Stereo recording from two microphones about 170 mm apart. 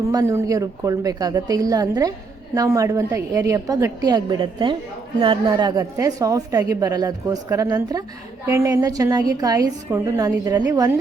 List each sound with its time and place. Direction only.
0.1 s a woman's voice: 20° right (ahead or behind)